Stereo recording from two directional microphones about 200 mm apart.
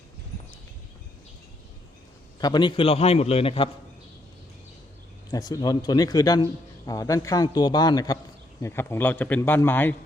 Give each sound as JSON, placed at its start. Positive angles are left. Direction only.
{"t": 2.4, "sound": "a man's voice", "side_deg": 20}
{"t": 5.3, "sound": "a man's voice", "side_deg": 20}